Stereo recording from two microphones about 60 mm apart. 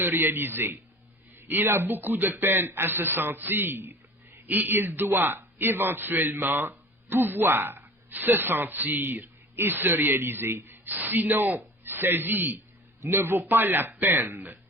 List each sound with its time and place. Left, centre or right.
0.0 s a man's voice: right